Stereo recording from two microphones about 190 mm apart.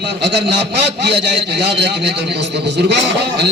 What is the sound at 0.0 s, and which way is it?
A man's voice, 60° right (ahead or behind).